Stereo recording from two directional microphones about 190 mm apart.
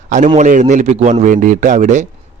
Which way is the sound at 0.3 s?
40° right (ahead or behind).